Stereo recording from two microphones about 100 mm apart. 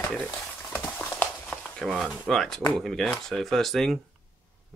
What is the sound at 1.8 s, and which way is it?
Speech, centre (ahead or behind).